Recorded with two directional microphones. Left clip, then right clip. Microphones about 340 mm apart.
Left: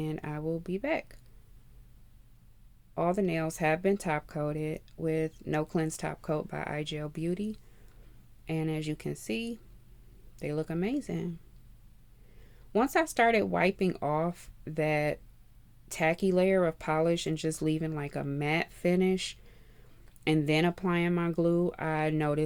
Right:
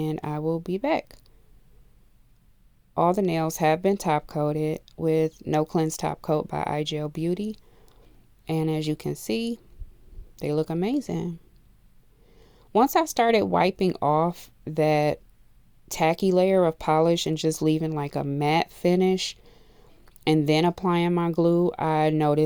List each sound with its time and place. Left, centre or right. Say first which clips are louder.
0.0 s speech: right 7 dB; right
2.9 s speech: right 7 dB; right
12.4 s speech: right 8 dB; right